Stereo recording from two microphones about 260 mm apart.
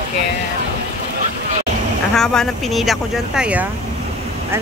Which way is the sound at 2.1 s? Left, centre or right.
Centre.